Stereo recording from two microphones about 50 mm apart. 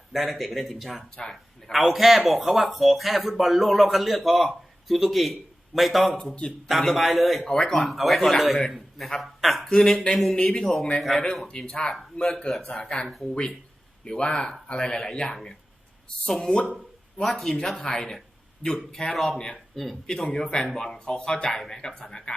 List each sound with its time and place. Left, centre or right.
0.1 s speech: centre
1.1 s speech: centre
1.8 s a man's voice: centre
9.6 s speech: centre
14.2 s speech: centre
16.6 s speech: centre
19.1 s speech: centre
20.1 s speech: centre